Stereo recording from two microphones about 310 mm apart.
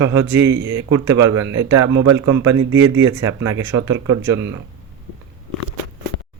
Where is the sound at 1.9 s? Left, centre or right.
Right.